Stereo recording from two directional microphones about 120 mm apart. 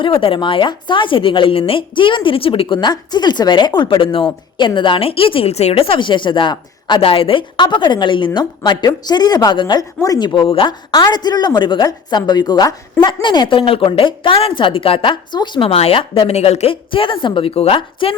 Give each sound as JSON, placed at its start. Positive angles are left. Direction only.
{"t": 0.0, "sound": "a woman's voice", "side_deg": 50}
{"t": 16.3, "sound": "a woman's voice", "side_deg": 60}